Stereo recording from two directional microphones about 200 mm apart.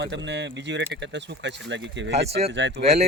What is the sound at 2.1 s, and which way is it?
Speech, 30° right (ahead or behind).